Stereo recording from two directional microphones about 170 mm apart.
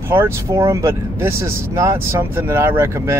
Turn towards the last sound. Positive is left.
turn(degrees=-15)  # may be behind; listen again after turning